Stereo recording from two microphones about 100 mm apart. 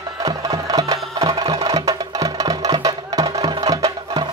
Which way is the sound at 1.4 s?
50° right (ahead or behind).